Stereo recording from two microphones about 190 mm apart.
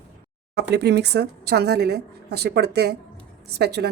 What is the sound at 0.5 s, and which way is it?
A woman's voice, 60° right (ahead or behind).